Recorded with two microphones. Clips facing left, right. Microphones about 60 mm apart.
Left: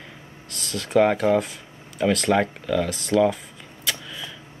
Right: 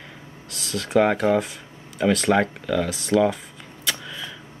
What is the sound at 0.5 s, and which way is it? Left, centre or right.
Speech, centre.